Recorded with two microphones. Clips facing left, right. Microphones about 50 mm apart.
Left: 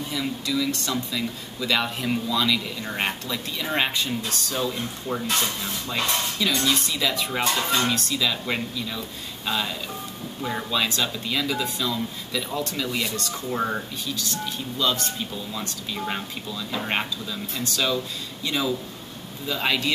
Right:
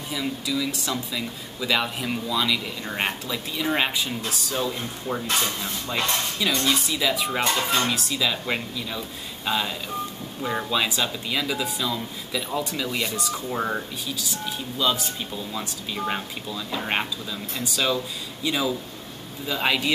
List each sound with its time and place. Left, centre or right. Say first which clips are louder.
0.1 s speech: right 1 dB; centre
7.4 s speech: left 1 dB; centre